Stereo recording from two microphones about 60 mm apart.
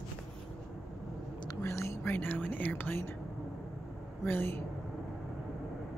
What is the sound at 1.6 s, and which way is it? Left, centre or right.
Whispering, left.